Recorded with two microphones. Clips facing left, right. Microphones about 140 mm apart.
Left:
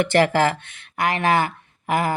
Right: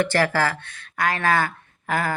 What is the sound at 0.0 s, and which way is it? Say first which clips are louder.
Speech: left 3 dB; 20° left (ahead or behind).